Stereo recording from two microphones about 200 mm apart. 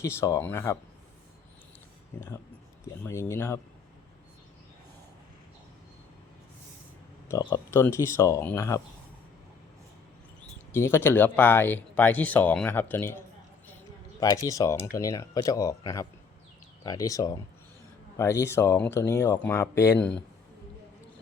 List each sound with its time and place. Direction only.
0.0 s speech: 15° left (ahead or behind)
2.1 s speech: 10° left (ahead or behind)
7.3 s speech: 15° left (ahead or behind)
10.8 s speech: 10° left (ahead or behind)
14.4 s speech: 15° left (ahead or behind)